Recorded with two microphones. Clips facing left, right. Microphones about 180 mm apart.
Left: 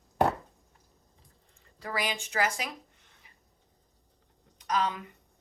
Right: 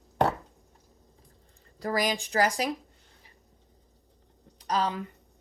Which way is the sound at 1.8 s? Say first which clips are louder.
Right 6 dB; 40° right (ahead or behind).